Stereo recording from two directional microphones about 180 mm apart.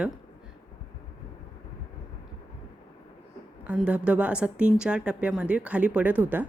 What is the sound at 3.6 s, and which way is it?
A woman's voice, 5° right (ahead or behind).